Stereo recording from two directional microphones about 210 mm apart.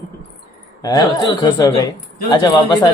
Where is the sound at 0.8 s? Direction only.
20° left (ahead or behind).